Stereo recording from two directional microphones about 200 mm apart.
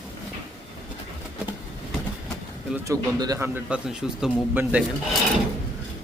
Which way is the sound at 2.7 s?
15° right (ahead or behind).